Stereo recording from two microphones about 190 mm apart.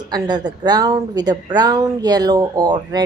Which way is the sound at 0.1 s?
20° right (ahead or behind).